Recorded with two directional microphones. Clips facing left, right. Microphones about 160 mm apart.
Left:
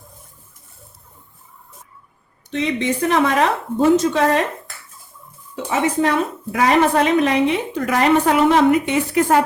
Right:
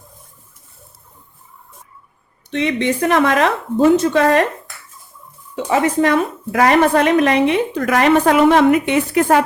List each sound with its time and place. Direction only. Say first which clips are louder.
2.5 s a woman's voice: right 2 dB; 65° right (ahead or behind)
3.9 s a woman's voice: right 3 dB; 60° right (ahead or behind)
5.8 s a woman's voice: right 1 dB; 65° right (ahead or behind)